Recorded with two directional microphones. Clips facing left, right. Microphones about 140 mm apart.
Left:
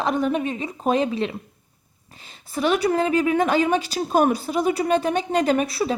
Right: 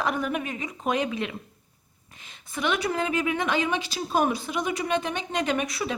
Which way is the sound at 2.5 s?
35° left (ahead or behind).